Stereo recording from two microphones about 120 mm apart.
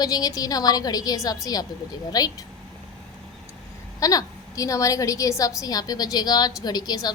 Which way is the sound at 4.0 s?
30° left (ahead or behind).